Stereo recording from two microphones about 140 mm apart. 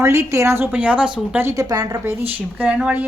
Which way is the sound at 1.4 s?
20° right (ahead or behind).